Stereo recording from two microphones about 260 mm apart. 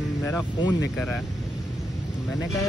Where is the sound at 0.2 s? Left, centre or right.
Centre.